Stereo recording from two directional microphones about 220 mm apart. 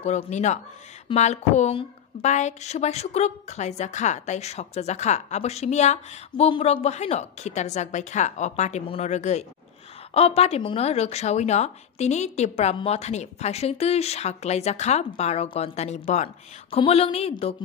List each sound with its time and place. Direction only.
0.0 s speech: 30° left (ahead or behind)